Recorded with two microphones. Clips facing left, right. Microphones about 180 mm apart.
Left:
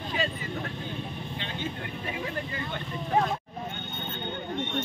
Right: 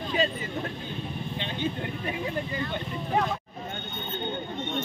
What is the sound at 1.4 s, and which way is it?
Speech, 20° right (ahead or behind).